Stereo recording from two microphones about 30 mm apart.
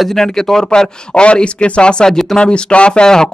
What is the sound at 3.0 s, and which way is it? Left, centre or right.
Speech, left.